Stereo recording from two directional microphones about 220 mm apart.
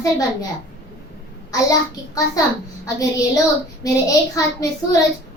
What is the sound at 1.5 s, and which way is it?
A child's voice, 15° left (ahead or behind).